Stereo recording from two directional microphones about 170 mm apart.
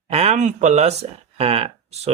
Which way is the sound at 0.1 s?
40° right (ahead or behind).